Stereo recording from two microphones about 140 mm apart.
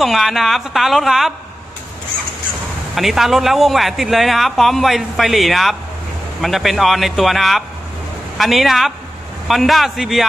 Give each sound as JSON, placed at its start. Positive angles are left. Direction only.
{"t": 0.0, "sound": "a man's voice", "side_deg": 0}
{"t": 2.9, "sound": "a man's voice", "side_deg": 0}